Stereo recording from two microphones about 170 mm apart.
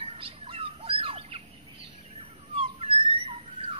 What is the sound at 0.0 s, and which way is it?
Bird, 35° right (ahead or behind).